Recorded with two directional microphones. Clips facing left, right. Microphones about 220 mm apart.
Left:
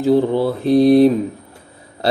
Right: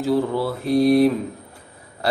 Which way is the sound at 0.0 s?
20° left (ahead or behind).